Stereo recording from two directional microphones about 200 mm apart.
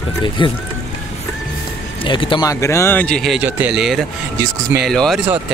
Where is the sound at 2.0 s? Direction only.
25° left (ahead or behind); by 5.2 s centre (ahead or behind).